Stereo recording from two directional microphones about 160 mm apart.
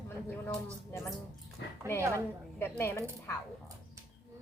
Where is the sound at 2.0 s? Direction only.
20° right (ahead or behind).